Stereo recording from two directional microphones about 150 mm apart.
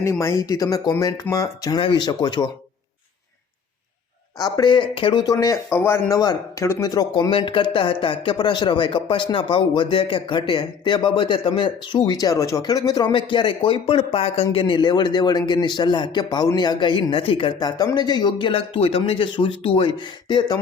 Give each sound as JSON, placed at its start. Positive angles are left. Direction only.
{"t": 0.0, "sound": "speech", "side_deg": 20}
{"t": 4.4, "sound": "speech", "side_deg": 25}
{"t": 5.2, "sound": "speech", "side_deg": 25}